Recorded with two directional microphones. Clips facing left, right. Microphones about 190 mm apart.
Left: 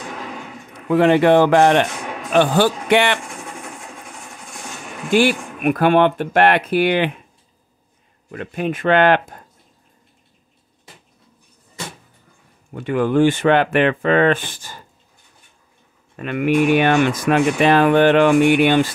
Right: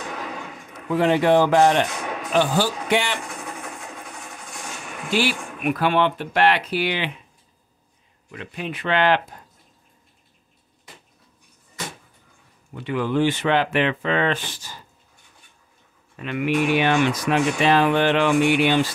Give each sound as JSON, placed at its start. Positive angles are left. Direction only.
{"t": 0.8, "sound": "speech", "side_deg": 65}
{"t": 5.1, "sound": "speech", "side_deg": 50}
{"t": 8.3, "sound": "speech", "side_deg": 50}
{"t": 12.7, "sound": "speech", "side_deg": 50}
{"t": 16.2, "sound": "speech", "side_deg": 50}